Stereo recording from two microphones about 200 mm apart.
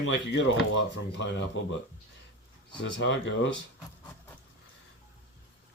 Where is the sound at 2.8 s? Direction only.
65° left (ahead or behind).